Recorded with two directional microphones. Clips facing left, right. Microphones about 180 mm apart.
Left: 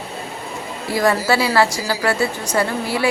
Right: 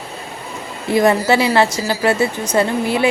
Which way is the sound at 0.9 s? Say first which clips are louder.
Right 4 dB; 20° right (ahead or behind).